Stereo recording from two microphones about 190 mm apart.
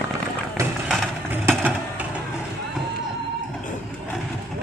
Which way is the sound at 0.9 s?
Centre (ahead or behind).